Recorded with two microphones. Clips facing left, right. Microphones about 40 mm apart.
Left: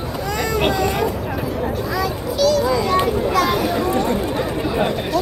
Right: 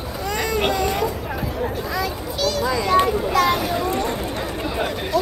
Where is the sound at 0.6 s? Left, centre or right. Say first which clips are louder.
Left 3 dB; centre.